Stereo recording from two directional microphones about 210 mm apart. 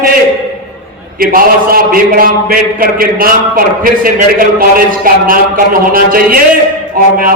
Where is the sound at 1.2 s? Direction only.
45° right (ahead or behind).